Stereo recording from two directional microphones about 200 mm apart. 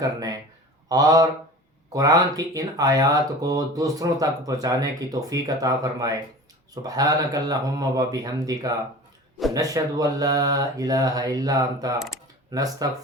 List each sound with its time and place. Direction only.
0.0 s speech: 20° right (ahead or behind)
11.9 s speech: centre (ahead or behind)
12.5 s speech: 20° right (ahead or behind)